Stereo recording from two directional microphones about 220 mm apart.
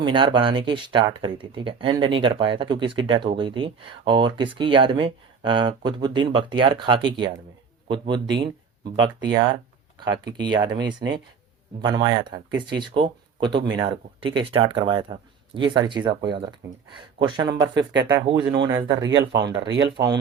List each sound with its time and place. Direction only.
0.0 s speech: 20° right (ahead or behind)
19.5 s speech: 55° right (ahead or behind)
19.8 s speech: 20° right (ahead or behind)